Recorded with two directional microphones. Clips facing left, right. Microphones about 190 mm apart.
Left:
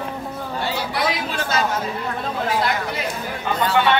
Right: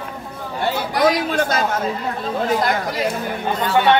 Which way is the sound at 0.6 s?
50° right (ahead or behind).